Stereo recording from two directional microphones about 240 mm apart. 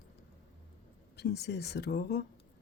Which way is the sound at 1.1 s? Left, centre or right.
Left.